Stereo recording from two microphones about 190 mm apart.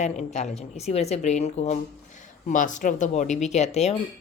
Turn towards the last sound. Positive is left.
turn(degrees=35)  # may be behind; listen again after turning